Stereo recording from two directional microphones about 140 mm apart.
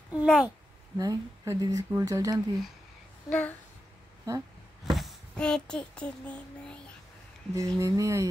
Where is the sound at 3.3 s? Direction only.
10° left (ahead or behind).